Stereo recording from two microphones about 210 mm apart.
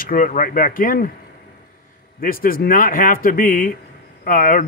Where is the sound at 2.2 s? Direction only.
45° left (ahead or behind).